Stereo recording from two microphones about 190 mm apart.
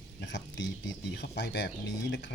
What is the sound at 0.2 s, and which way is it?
Speech, 70° left (ahead or behind).